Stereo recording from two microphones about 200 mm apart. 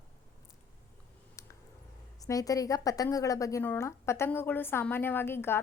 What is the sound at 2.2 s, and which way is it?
A woman's voice, 15° left (ahead or behind).